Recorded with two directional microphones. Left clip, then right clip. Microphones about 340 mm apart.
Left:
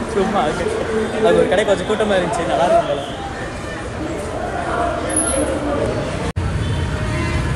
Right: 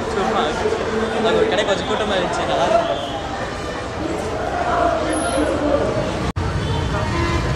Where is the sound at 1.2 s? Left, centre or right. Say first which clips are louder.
Left 4 dB; centre.